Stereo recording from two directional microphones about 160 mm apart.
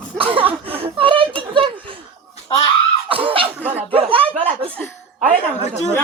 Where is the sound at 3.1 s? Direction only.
35° right (ahead or behind).